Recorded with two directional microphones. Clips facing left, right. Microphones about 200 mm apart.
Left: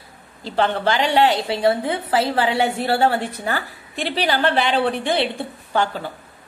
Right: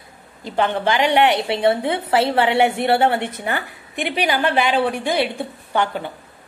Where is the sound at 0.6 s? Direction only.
15° right (ahead or behind).